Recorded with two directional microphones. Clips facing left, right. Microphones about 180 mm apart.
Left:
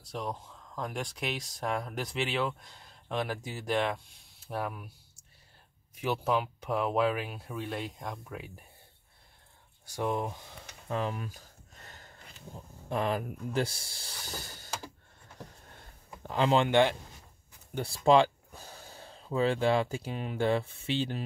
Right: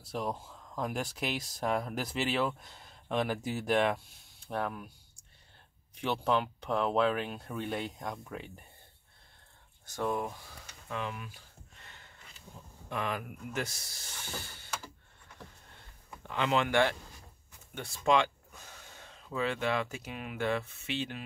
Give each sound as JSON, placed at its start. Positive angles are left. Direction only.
{"t": 0.0, "sound": "speech", "side_deg": 0}
{"t": 5.9, "sound": "speech", "side_deg": 5}
{"t": 9.8, "sound": "speech", "side_deg": 15}
{"t": 10.9, "sound": "a sound", "side_deg": 35}
{"t": 12.9, "sound": "speech", "side_deg": 35}
{"t": 15.3, "sound": "a sound", "side_deg": 40}
{"t": 17.7, "sound": "speech", "side_deg": 35}